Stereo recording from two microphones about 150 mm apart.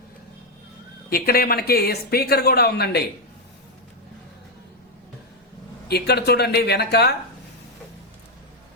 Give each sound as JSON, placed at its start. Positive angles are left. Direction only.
{"t": 1.1, "sound": "speech", "side_deg": 90}
{"t": 5.9, "sound": "speech", "side_deg": 90}